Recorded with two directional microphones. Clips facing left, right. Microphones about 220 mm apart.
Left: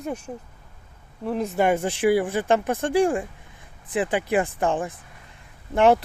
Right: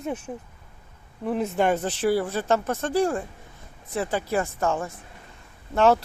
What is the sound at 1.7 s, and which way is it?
Speech, 10° left (ahead or behind).